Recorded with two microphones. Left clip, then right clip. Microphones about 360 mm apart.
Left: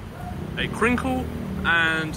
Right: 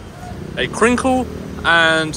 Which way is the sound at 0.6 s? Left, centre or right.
Centre.